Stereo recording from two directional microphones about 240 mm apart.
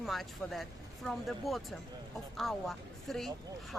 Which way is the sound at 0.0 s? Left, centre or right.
Centre.